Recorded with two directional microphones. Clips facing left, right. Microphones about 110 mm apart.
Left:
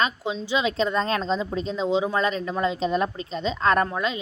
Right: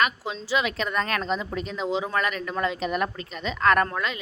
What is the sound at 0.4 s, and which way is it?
Speech, 20° left (ahead or behind).